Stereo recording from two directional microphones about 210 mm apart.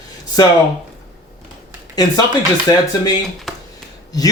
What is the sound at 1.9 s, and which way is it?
Speech, 15° left (ahead or behind).